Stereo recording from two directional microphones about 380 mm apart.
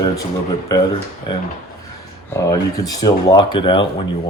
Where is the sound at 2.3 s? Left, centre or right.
Centre.